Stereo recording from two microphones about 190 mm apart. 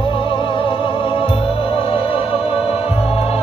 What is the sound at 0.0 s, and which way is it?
Music, 30° left (ahead or behind).